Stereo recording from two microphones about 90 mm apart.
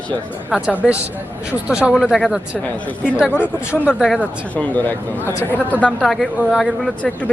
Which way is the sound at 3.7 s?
5° left (ahead or behind).